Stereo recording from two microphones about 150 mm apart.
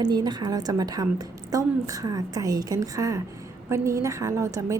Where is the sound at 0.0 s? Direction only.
30° right (ahead or behind).